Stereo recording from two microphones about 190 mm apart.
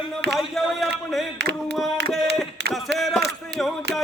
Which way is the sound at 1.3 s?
60° right (ahead or behind).